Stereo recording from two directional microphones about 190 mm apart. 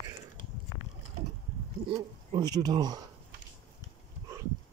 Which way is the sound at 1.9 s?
25° right (ahead or behind).